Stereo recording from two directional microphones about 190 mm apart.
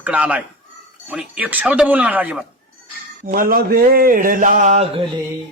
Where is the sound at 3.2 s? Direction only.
50° right (ahead or behind).